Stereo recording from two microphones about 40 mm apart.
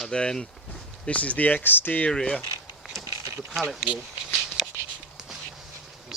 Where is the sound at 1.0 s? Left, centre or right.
Left.